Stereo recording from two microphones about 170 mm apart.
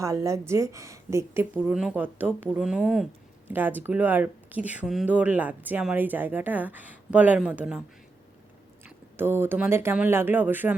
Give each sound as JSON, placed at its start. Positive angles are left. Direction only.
{"t": 0.0, "sound": "speech", "side_deg": -20}
{"t": 9.1, "sound": "speech", "side_deg": -15}